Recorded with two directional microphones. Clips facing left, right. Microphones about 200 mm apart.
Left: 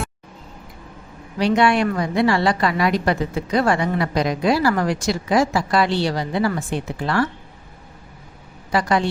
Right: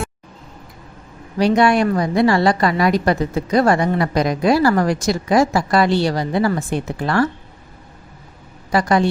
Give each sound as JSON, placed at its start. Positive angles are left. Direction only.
{"t": 1.4, "sound": "a woman's voice", "side_deg": -40}
{"t": 8.7, "sound": "a woman's voice", "side_deg": -45}